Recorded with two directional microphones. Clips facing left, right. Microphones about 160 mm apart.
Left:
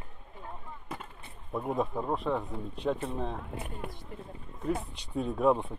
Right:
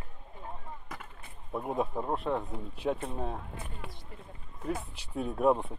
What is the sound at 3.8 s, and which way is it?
Speech, 50° left (ahead or behind).